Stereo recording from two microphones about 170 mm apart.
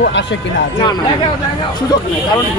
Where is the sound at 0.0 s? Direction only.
90° left.